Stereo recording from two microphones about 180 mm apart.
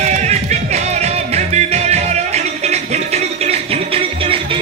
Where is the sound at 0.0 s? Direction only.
40° right (ahead or behind).